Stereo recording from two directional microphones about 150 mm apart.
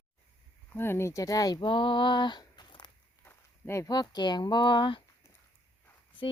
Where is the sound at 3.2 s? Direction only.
15° left (ahead or behind); by 5.0 s 35° left (ahead or behind).